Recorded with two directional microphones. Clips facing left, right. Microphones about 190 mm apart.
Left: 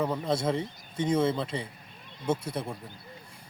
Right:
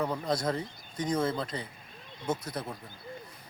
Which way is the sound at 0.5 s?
25° left (ahead or behind).